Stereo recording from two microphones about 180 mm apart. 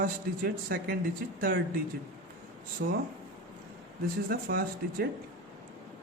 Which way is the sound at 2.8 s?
70° right (ahead or behind).